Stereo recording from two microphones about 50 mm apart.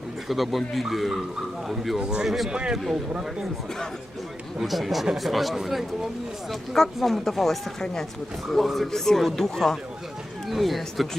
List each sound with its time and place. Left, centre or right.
0.3 s speech: centre
2.0 s a man's voice: centre
2.5 s a man's voice: centre
2.7 s a man's voice: centre
4.5 s speech: centre